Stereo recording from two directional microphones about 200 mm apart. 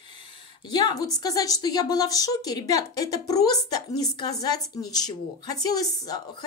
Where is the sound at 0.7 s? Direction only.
20° left (ahead or behind).